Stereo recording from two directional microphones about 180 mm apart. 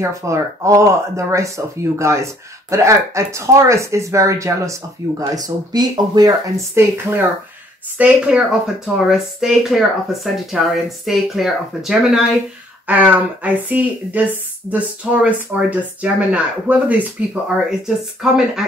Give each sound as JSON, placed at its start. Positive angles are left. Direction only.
{"t": 0.0, "sound": "a woman's voice", "side_deg": -15}